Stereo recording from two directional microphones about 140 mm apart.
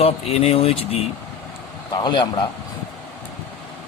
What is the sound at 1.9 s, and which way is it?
Speech, 35° left (ahead or behind).